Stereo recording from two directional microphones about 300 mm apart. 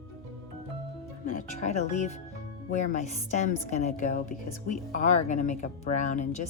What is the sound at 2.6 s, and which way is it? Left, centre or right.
A woman's voice, left.